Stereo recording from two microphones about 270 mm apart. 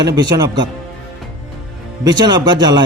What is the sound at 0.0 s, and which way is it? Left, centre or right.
Speech, centre.